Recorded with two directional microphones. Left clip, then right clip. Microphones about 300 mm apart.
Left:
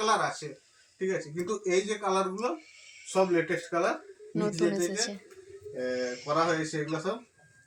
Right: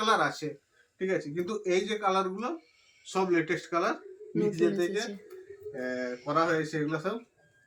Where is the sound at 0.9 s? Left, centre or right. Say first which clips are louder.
Right 1 dB; centre.